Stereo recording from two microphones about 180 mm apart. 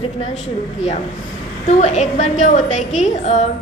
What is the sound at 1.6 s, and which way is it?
A woman's voice, 40° left (ahead or behind).